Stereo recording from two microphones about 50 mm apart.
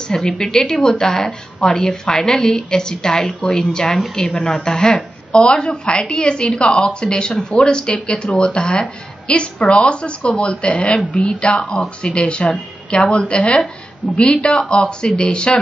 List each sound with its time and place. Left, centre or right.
0.0 s a woman's voice: centre